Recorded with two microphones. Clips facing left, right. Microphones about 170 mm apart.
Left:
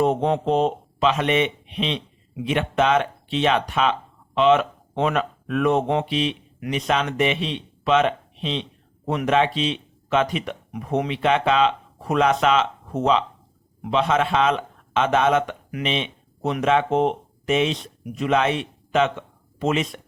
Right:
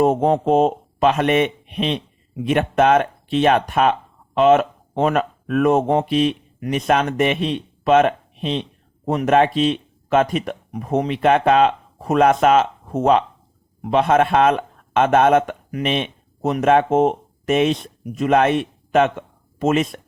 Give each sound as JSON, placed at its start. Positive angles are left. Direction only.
{"t": 0.0, "sound": "speech", "side_deg": -45}